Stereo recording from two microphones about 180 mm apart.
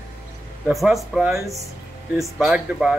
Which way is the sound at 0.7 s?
Centre (ahead or behind).